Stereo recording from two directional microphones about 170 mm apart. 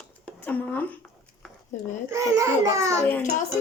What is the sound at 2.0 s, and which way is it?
Speech, 20° right (ahead or behind).